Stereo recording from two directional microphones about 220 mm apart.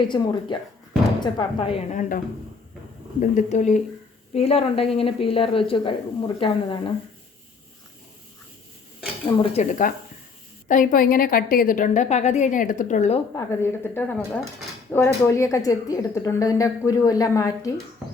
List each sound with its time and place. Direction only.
0.1 s a woman's voice: 20° left (ahead or behind)
9.2 s a woman's voice: 25° left (ahead or behind)
13.3 s a woman's voice: 10° left (ahead or behind)